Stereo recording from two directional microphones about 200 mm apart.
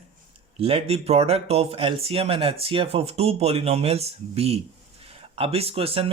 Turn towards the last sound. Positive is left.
turn(degrees=-30)  # may be behind; listen again after turning